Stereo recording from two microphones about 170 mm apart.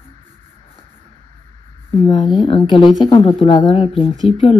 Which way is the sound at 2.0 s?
30° left (ahead or behind).